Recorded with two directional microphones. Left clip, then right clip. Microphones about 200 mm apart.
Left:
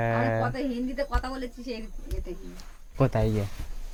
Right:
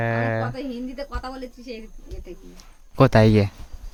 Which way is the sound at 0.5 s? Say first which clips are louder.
Left 1 dB; 5° right (ahead or behind).